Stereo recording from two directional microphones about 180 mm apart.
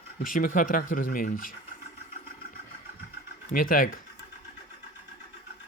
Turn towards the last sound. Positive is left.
turn(degrees=50)  # may be behind; listen again after turning